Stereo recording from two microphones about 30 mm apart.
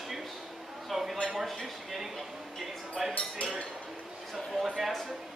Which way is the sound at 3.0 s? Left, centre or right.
Centre.